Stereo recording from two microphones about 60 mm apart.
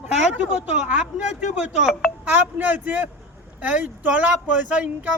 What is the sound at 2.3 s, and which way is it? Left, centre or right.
Speech, right.